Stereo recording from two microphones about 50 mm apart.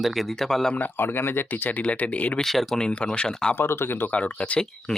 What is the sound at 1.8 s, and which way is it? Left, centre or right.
Speech, left.